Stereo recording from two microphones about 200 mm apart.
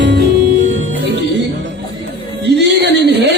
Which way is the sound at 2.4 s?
60° right (ahead or behind).